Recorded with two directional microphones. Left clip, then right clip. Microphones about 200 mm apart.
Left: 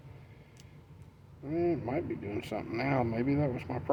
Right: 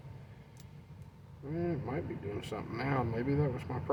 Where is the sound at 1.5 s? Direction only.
40° left (ahead or behind).